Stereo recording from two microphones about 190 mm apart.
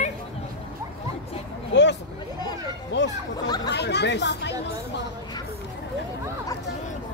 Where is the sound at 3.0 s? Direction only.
70° left (ahead or behind).